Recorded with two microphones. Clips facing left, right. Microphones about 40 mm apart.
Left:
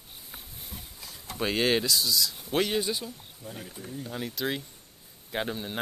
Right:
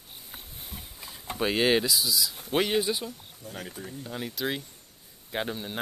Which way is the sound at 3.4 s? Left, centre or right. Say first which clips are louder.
Right 1 dB; left.